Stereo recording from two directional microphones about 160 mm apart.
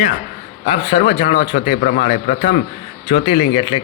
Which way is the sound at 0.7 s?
30° left (ahead or behind).